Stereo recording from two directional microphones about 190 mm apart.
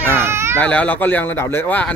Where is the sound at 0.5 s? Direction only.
5° left (ahead or behind).